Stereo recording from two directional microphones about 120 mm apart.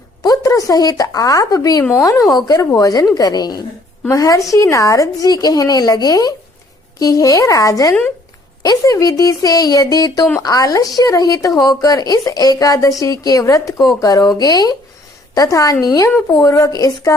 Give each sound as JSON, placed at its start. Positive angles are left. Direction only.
{"t": 0.2, "sound": "a woman's voice", "side_deg": 30}